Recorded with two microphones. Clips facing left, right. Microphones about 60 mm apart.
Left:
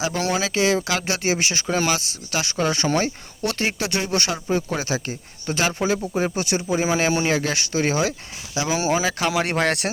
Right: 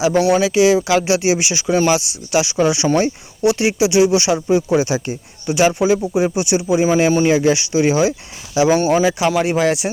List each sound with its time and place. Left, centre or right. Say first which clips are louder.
0.2 s speech: right 9 dB; centre
0.4 s speech: right 7 dB; centre
1.6 s speech: right 9 dB; centre
2.3 s speech: right 7 dB; centre
4.7 s speech: right 9 dB; centre
7.1 s speech: right 7 dB; centre
7.3 s speech: right 8 dB; centre
8.7 s speech: right 5 dB; centre
9.0 s speech: right 6 dB; centre